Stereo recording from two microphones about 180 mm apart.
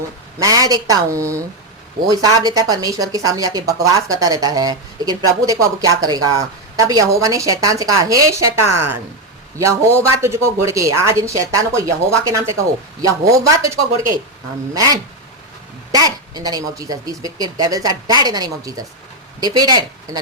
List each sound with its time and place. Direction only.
0.3 s speech: 20° right (ahead or behind)
15.9 s speech: 20° right (ahead or behind)